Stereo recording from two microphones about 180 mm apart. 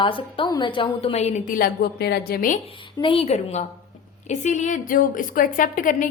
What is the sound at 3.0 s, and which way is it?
A woman's voice, 30° left (ahead or behind).